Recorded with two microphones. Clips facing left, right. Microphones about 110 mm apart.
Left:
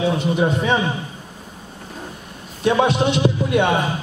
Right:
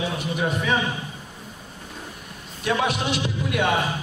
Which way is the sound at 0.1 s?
30° left (ahead or behind).